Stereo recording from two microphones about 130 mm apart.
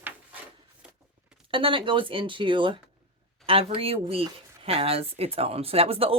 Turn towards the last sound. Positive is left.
turn(degrees=-50)  # may be behind; listen again after turning